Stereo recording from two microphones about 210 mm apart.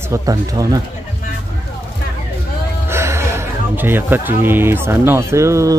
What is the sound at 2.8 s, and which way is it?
Speech, 10° right (ahead or behind).